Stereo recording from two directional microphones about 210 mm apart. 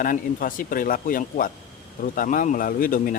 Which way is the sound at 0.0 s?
40° left (ahead or behind).